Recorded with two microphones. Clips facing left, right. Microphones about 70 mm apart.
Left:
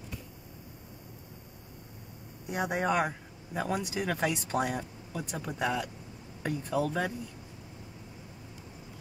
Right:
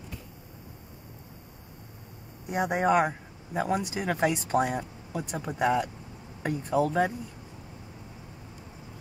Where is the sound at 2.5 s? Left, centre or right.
Right.